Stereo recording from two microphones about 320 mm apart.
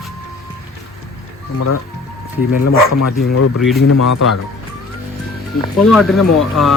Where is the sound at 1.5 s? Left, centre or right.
Left.